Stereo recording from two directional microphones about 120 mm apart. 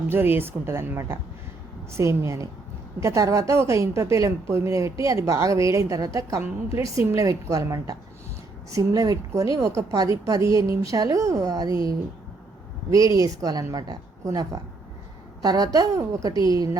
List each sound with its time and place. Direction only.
0.1 s a woman's voice: 15° right (ahead or behind)
13.2 s a woman's voice: 30° right (ahead or behind)